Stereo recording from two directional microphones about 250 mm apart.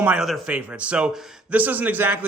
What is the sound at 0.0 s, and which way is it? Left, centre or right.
Speech, centre.